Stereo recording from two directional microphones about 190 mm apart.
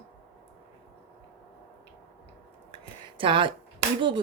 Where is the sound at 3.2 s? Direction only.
25° right (ahead or behind).